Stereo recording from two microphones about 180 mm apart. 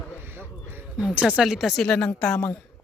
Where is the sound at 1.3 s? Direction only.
Centre (ahead or behind).